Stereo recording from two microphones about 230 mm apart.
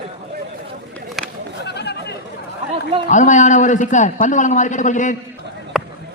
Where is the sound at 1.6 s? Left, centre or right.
Left.